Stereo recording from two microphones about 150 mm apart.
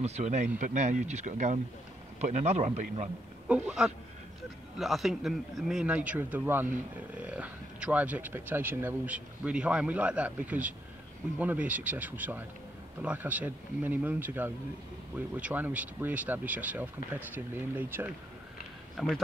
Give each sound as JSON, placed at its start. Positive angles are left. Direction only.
{"t": 0.0, "sound": "a man's voice", "side_deg": -50}
{"t": 3.4, "sound": "a man's voice", "side_deg": -5}
{"t": 18.9, "sound": "a man's voice", "side_deg": 0}